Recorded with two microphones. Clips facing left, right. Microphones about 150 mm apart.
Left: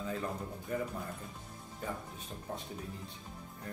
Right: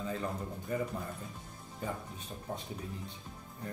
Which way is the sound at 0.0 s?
Centre (ahead or behind).